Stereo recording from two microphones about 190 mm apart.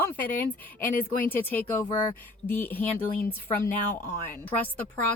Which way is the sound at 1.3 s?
10° left (ahead or behind).